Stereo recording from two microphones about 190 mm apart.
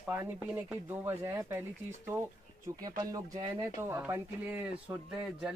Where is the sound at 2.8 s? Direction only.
20° right (ahead or behind).